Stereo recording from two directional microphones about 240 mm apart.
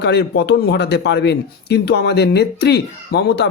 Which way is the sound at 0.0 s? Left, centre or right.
Left.